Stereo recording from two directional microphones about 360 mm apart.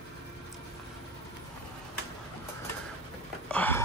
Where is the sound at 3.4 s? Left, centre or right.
Centre.